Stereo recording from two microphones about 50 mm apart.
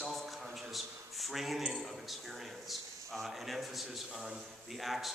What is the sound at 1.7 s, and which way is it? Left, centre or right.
A man's voice, centre.